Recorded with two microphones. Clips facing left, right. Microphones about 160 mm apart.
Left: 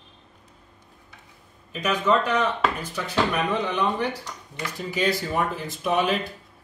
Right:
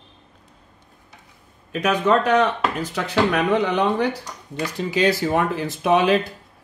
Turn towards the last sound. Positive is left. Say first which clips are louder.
# right 6 dB
turn(degrees=-90)